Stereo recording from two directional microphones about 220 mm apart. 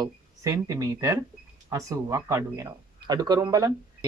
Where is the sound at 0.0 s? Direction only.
15° right (ahead or behind).